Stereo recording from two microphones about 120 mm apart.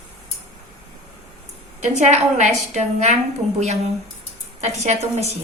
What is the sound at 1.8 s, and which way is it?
A woman's voice, 70° right (ahead or behind).